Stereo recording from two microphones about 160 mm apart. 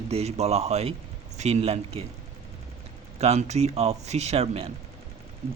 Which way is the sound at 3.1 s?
40° right (ahead or behind).